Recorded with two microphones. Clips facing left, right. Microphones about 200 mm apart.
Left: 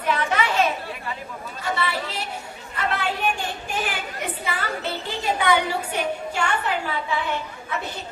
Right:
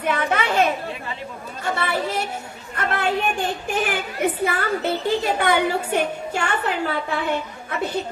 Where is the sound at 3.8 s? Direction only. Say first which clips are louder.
Right 6 dB; 55° right (ahead or behind).